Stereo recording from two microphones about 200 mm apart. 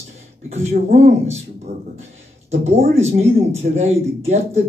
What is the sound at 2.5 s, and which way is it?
Speech, 35° right (ahead or behind).